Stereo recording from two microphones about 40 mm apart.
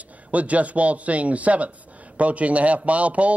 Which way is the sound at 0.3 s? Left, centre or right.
Right.